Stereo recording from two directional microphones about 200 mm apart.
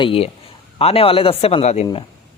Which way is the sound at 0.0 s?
30° left (ahead or behind).